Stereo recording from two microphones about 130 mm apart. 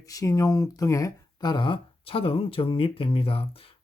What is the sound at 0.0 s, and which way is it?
Speech, 25° left (ahead or behind).